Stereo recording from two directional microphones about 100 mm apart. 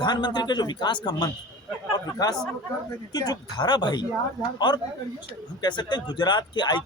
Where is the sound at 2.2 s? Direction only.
40° left (ahead or behind).